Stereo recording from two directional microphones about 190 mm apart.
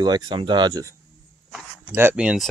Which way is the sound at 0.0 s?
25° right (ahead or behind).